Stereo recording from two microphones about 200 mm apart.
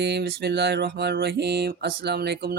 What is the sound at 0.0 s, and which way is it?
Mantra, 55° right (ahead or behind).